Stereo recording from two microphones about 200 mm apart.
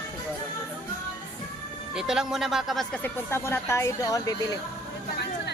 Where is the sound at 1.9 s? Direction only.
Centre (ahead or behind); by 4.6 s 15° left (ahead or behind).